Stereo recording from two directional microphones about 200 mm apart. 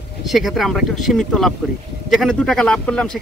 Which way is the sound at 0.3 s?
Centre (ahead or behind).